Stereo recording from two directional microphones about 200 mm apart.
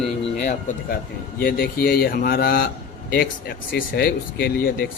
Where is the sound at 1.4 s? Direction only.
50° left (ahead or behind).